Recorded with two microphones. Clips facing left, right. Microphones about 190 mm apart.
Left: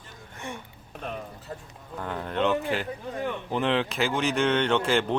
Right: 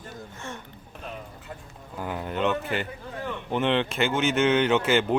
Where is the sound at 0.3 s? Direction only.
15° left (ahead or behind).